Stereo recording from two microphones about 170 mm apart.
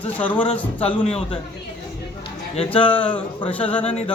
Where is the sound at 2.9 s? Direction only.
10° left (ahead or behind).